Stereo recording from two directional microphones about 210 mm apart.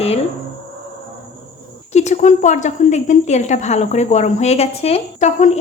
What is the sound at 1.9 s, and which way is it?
Speech, 35° left (ahead or behind).